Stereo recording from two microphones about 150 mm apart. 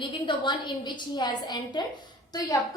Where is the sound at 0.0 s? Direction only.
30° left (ahead or behind).